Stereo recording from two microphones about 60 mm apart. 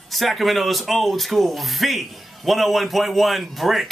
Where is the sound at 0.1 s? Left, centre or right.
Centre.